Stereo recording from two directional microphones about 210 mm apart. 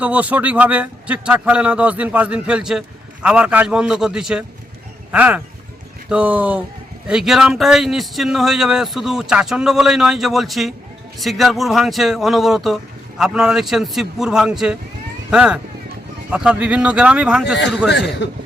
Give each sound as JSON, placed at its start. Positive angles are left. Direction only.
{"t": 0.0, "sound": "a man's voice", "side_deg": -5}
{"t": 18.2, "sound": "cough", "side_deg": 55}